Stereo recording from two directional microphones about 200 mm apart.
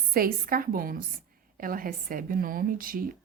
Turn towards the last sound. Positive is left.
turn(degrees=-45)  # may be behind; listen again after turning